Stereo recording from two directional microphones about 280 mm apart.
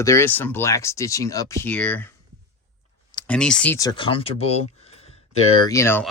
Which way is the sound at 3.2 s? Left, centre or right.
Centre.